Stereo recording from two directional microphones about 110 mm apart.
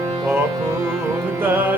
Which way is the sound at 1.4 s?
20° right (ahead or behind).